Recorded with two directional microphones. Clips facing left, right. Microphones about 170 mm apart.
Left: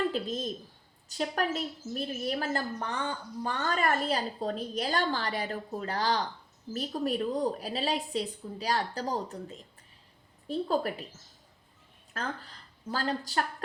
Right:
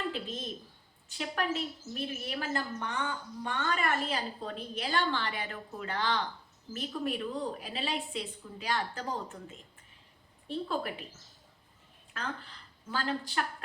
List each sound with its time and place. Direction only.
0.1 s a woman's voice: 40° left (ahead or behind)
12.1 s speech: 40° left (ahead or behind)